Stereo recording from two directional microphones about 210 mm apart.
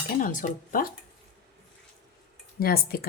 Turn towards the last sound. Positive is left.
turn(degrees=45)  # may be behind; listen again after turning